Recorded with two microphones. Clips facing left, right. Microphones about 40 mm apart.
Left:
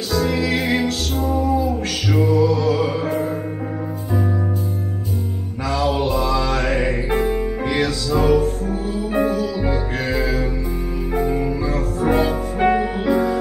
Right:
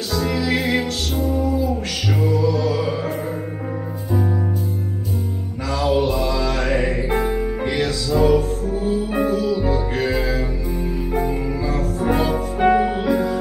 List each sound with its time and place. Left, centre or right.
0.1 s music: centre
5.7 s music: centre